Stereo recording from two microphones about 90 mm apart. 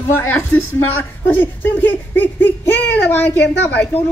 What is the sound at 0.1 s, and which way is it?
A woman's voice, 25° left (ahead or behind).